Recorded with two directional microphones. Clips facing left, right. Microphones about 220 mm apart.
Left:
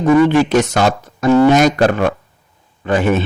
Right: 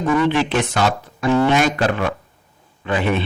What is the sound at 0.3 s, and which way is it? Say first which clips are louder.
Speech: left 6 dB; 45° left (ahead or behind).